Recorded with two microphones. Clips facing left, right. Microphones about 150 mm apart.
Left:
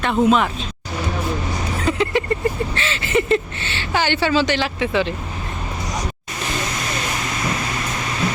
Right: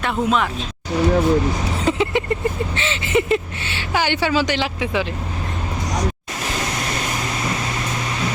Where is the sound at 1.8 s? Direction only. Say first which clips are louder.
Even; 20° right (ahead or behind).